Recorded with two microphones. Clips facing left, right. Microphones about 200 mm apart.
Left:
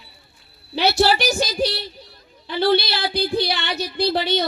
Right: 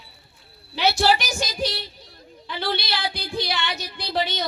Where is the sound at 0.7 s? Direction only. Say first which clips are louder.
Left 2 dB; 35° left (ahead or behind).